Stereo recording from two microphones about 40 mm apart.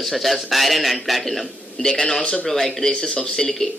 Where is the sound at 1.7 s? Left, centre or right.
Centre.